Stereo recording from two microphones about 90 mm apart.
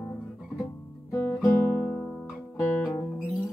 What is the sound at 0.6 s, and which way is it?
Guitar, 30° left (ahead or behind).